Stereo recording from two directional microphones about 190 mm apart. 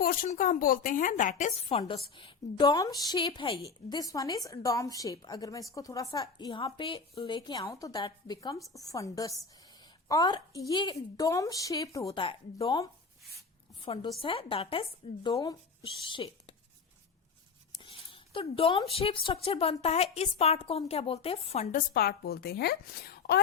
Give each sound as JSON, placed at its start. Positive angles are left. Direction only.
{"t": 0.0, "sound": "a woman's voice", "side_deg": 50}
{"t": 1.8, "sound": "speech", "side_deg": 25}
{"t": 17.8, "sound": "speech", "side_deg": 30}
{"t": 21.9, "sound": "a woman's voice", "side_deg": 55}